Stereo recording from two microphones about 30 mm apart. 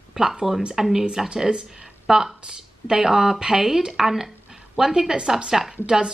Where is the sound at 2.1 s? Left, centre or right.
Centre.